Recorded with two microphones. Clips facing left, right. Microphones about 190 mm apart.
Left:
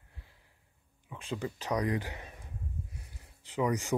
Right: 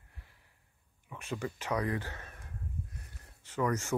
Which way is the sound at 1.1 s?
10° left (ahead or behind).